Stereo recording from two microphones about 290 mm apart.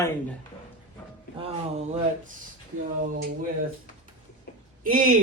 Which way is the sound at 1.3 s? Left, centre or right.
Right.